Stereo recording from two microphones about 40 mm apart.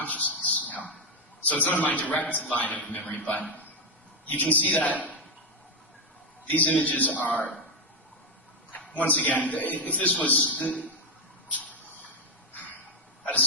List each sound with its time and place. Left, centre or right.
0.0 s a sound: left
1.6 s a man's voice: left
4.3 s speech: left
6.5 s speech: left
9.0 s speech: left
11.5 s a sound: left